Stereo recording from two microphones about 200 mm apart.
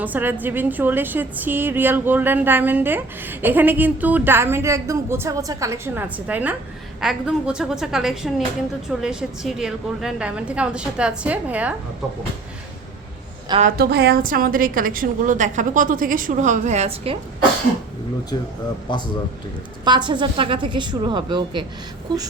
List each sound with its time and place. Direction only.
0.0 s a woman's voice: 10° right (ahead or behind)
13.6 s a woman's voice: 50° right (ahead or behind); by 17.2 s 30° right (ahead or behind)
19.8 s speech: 20° right (ahead or behind)